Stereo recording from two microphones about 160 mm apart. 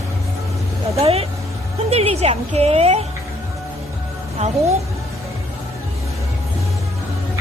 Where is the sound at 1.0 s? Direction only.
40° right (ahead or behind).